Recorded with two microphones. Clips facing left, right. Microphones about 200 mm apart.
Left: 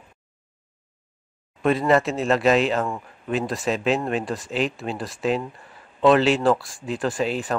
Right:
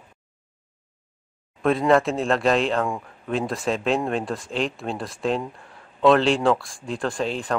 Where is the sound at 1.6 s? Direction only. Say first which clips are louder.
Right 1 dB; centre (ahead or behind).